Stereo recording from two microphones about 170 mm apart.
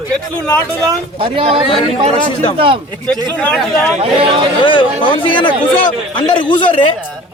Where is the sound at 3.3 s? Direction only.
5° left (ahead or behind).